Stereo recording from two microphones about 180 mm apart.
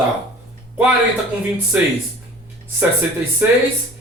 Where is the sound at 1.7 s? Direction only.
5° right (ahead or behind).